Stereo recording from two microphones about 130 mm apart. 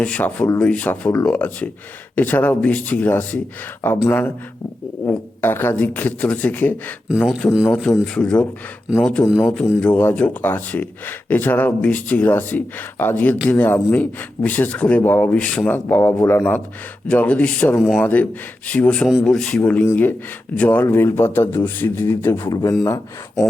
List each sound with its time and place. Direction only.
0.0 s speech: 10° left (ahead or behind)
5.0 s speech: 15° left (ahead or behind)
17.7 s speech: 5° right (ahead or behind)
18.0 s speech: 10° left (ahead or behind)
22.4 s speech: 30° left (ahead or behind)